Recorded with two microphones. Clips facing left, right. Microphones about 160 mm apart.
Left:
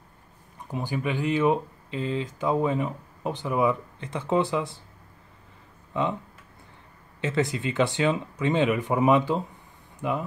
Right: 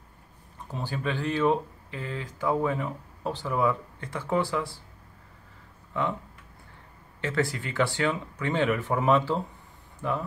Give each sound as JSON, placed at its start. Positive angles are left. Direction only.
{"t": 0.7, "sound": "speech", "side_deg": 15}
{"t": 5.9, "sound": "speech", "side_deg": 20}
{"t": 7.2, "sound": "speech", "side_deg": 20}